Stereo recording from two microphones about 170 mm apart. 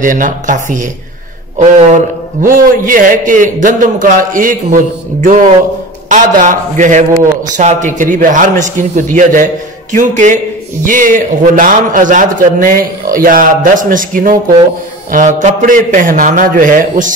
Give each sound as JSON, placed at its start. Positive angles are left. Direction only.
{"t": 0.0, "sound": "a man's voice", "side_deg": -50}
{"t": 2.4, "sound": "a man's voice", "side_deg": -55}